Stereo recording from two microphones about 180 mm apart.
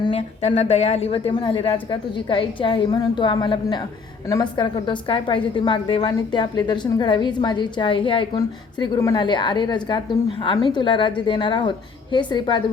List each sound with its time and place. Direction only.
0.0 s a woman's voice: 30° left (ahead or behind)